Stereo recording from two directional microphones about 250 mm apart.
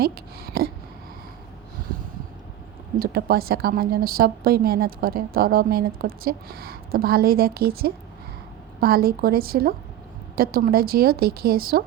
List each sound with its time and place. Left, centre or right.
0.0 s a woman's voice: right
3.0 s a woman's voice: right